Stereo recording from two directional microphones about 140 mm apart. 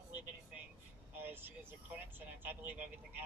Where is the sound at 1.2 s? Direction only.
15° right (ahead or behind).